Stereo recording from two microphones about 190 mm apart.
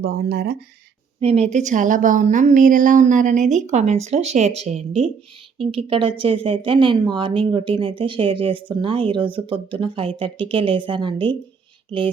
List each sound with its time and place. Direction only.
0.0 s speech: 55° right (ahead or behind)
1.2 s a woman's voice: 35° right (ahead or behind)